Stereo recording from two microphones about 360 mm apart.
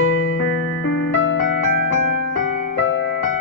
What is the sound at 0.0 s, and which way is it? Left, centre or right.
Music, left.